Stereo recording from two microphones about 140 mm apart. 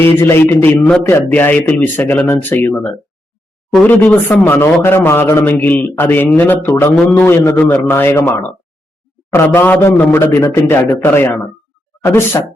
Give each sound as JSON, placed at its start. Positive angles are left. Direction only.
{"t": 0.2, "sound": "a man's voice", "side_deg": 15}